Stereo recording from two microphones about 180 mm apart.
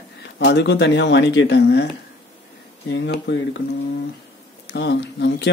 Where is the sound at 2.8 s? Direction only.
80° left.